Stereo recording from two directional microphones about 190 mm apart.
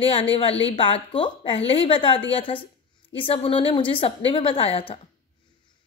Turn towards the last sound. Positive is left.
turn(degrees=30)  # may be behind; listen again after turning